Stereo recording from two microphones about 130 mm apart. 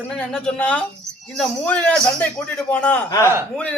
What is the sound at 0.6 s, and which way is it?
A man's voice, 10° left (ahead or behind).